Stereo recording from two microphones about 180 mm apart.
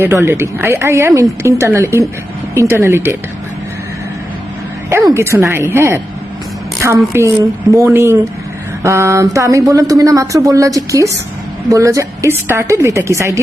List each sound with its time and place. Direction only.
0.0 s speech: 15° right (ahead or behind)
4.9 s a woman's voice: 15° right (ahead or behind)